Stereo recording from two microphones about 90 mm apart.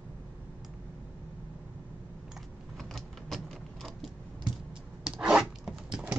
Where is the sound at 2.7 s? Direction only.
Centre (ahead or behind).